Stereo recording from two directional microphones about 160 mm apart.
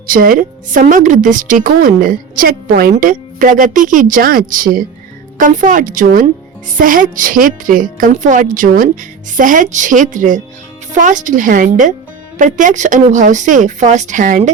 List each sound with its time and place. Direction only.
0.1 s a woman's voice: 60° right (ahead or behind)